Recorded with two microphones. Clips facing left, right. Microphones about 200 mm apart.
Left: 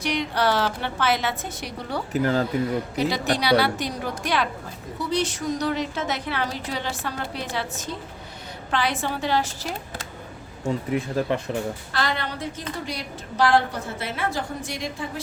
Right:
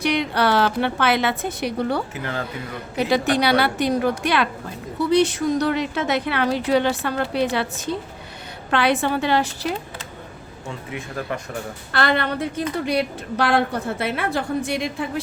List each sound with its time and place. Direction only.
0.0 s a woman's voice: 60° right (ahead or behind)
2.1 s speech: 40° left (ahead or behind)
3.1 s a woman's voice: 55° right (ahead or behind)
10.9 s speech: 35° left (ahead or behind)
11.9 s a woman's voice: 65° right (ahead or behind)